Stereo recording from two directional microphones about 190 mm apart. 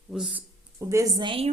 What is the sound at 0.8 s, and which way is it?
Speech, 15° right (ahead or behind).